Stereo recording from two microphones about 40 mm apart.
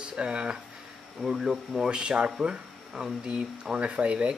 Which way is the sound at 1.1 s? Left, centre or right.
Centre.